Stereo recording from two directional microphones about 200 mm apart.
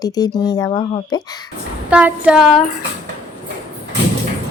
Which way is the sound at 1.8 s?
5° right (ahead or behind).